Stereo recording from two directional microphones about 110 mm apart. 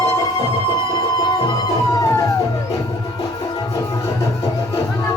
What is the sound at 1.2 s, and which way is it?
Music, 45° left (ahead or behind).